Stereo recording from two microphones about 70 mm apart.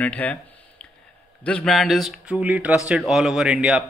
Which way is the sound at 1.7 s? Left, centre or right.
Centre.